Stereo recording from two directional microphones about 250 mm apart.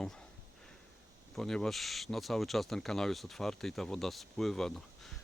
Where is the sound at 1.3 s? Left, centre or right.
Centre.